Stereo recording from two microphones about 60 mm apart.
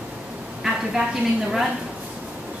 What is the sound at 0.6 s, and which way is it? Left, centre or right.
Speech, centre.